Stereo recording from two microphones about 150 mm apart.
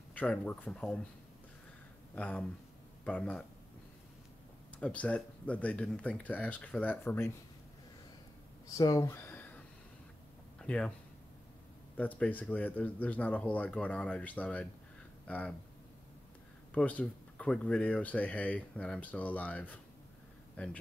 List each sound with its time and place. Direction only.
0.1 s speech: 10° left (ahead or behind)
2.1 s speech: 10° left (ahead or behind)
4.7 s speech: 10° left (ahead or behind)
8.7 s speech: 25° left (ahead or behind)
10.6 s a sound: 5° left (ahead or behind)
12.0 s speech: 10° left (ahead or behind)
16.7 s speech: 10° left (ahead or behind)